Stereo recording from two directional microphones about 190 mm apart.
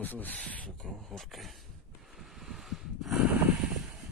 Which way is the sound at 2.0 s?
Centre (ahead or behind).